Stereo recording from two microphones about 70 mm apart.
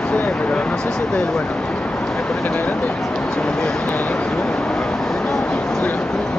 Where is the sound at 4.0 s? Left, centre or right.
Centre.